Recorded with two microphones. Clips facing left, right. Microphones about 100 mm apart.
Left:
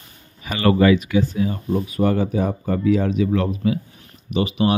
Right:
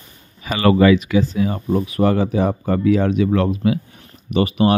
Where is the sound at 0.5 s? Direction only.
90° right.